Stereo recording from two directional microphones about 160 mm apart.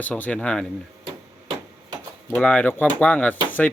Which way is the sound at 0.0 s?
10° left (ahead or behind).